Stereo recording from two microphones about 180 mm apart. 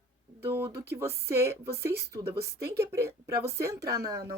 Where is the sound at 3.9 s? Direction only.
20° right (ahead or behind).